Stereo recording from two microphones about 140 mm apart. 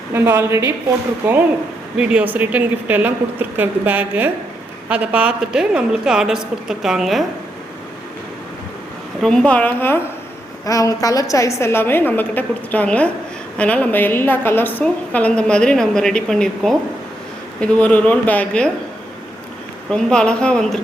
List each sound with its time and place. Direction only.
0.1 s a woman's voice: 20° right (ahead or behind); by 7.3 s centre (ahead or behind)
9.2 s a woman's voice: 5° left (ahead or behind)
19.9 s a woman's voice: 5° left (ahead or behind)